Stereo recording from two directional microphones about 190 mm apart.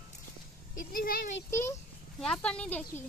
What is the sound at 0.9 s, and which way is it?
Speech, 50° left (ahead or behind).